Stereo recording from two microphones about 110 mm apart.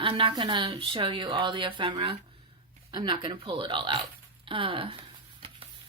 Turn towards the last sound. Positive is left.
turn(degrees=-55)  # may be behind; listen again after turning